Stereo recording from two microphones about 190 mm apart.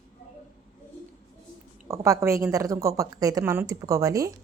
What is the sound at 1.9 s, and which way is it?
A woman's voice, 15° right (ahead or behind).